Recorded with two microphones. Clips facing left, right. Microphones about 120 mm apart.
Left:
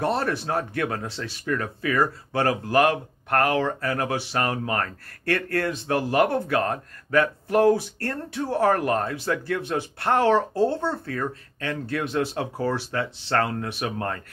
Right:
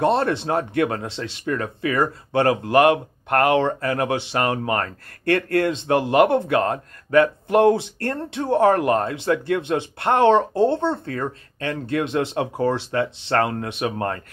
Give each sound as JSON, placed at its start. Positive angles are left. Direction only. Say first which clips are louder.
{"t": 0.0, "sound": "speech", "louder": "right 5 dB", "side_deg": -25}
{"t": 13.9, "sound": "speech", "louder": "right 4 dB", "side_deg": -35}